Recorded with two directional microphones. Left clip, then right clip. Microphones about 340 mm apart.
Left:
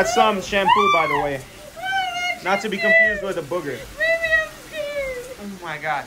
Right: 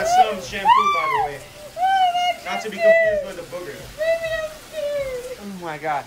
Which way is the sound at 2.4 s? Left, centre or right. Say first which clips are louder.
Left 5 dB; centre.